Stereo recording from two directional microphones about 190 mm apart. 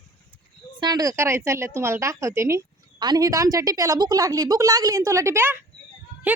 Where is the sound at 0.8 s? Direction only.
20° right (ahead or behind).